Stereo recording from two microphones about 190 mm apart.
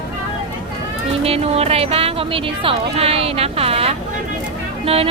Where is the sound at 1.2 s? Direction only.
30° right (ahead or behind).